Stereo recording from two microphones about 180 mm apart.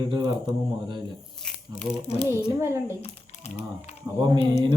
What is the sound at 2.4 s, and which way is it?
Speech, 15° right (ahead or behind).